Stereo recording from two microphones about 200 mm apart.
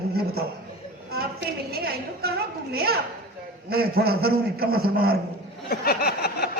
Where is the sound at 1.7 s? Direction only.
50° right (ahead or behind).